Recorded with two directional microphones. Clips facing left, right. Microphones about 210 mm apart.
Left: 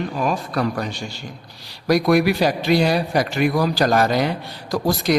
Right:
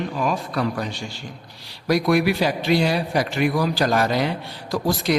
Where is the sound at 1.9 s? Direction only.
40° left (ahead or behind).